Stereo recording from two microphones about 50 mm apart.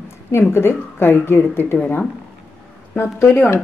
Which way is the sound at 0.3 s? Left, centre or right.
Left.